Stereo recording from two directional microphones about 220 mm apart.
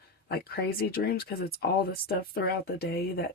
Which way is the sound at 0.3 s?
45° left (ahead or behind).